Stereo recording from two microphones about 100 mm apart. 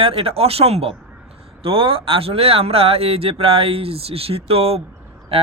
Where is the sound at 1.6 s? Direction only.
65° right (ahead or behind).